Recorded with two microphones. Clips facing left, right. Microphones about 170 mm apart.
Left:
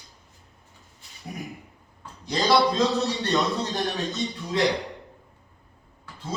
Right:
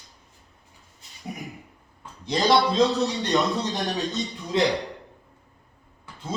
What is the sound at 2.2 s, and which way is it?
A man's voice, 20° right (ahead or behind).